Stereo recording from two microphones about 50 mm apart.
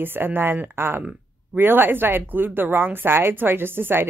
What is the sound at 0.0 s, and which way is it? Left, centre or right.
Speech, right.